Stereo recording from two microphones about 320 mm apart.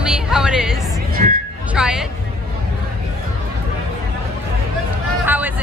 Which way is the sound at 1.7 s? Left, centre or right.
Centre.